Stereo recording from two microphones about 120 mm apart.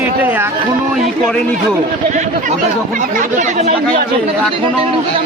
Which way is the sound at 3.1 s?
80° right.